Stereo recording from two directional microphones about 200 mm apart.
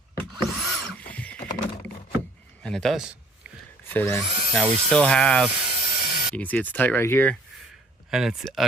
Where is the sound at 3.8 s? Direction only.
10° left (ahead or behind).